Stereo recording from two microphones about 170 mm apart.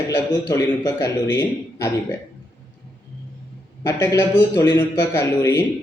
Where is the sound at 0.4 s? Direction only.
20° left (ahead or behind).